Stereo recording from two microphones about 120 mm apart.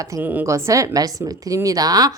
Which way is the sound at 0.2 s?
15° right (ahead or behind).